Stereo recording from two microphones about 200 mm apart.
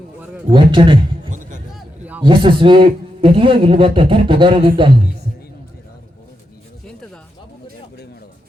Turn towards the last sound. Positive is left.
turn(degrees=5)  # may be behind; listen again after turning